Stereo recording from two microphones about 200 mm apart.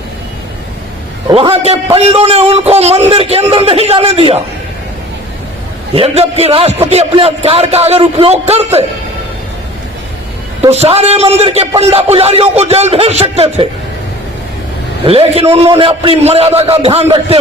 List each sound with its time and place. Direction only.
1.3 s a man's voice: 25° right (ahead or behind)
5.9 s a man's voice: 30° right (ahead or behind)
10.6 s speech: 30° right (ahead or behind)
15.0 s a man's voice: 30° right (ahead or behind)